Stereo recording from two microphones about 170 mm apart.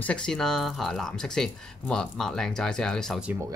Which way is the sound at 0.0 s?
5° left (ahead or behind).